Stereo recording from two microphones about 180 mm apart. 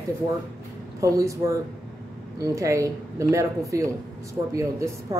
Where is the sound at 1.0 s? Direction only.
20° right (ahead or behind).